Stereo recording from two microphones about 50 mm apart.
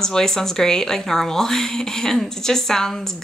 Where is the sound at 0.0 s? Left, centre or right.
Centre.